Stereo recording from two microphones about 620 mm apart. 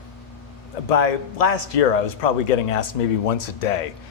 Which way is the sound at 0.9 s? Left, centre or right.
Left.